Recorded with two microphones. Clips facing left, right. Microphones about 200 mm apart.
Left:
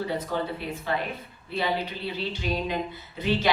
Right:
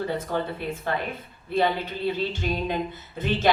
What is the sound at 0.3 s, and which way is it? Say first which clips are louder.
A woman's voice: right 2 dB; 50° right (ahead or behind).